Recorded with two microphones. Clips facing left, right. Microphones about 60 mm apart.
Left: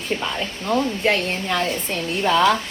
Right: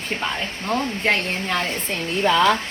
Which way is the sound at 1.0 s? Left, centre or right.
Right.